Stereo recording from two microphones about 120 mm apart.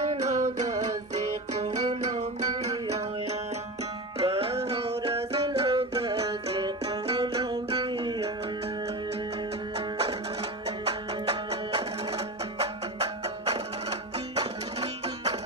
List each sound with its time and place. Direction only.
0.1 s music: 70° right (ahead or behind)
4.2 s music: 50° right (ahead or behind)
7.2 s music: 35° right (ahead or behind)
10.9 s music: 55° right (ahead or behind)